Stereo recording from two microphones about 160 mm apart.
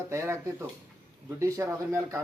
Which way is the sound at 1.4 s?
20° right (ahead or behind).